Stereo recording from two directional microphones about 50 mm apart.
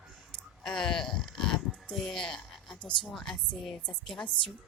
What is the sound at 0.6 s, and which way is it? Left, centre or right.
Speech, centre.